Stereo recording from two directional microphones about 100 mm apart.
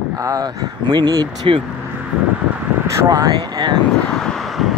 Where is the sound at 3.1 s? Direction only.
40° right (ahead or behind).